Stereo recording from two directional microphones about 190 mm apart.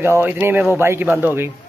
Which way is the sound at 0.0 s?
10° right (ahead or behind).